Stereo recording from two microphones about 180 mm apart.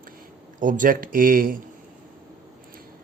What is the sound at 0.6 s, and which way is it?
Speech, 45° right (ahead or behind).